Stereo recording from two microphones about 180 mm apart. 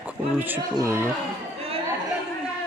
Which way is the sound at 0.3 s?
10° right (ahead or behind).